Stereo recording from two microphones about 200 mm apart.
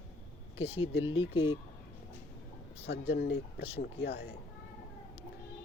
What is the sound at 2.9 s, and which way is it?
Speech, 55° left (ahead or behind).